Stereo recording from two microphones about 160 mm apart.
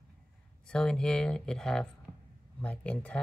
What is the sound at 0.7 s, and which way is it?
Speech, 5° left (ahead or behind).